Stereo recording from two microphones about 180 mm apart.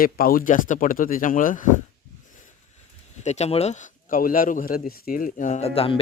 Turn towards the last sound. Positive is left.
turn(degrees=30)  # may be behind; listen again after turning